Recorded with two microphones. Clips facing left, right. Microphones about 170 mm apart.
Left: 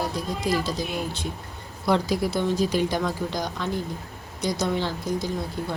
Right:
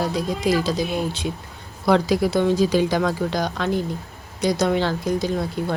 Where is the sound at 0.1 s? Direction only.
85° right.